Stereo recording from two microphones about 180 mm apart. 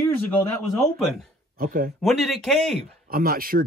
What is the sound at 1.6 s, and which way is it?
Speech, 50° right (ahead or behind).